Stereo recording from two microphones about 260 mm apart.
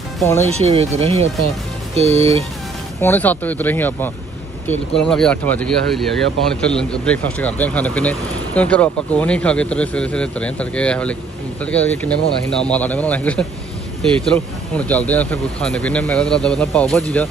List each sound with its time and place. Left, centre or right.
0.2 s speech: centre
0.5 s speech: right
3.0 s speech: centre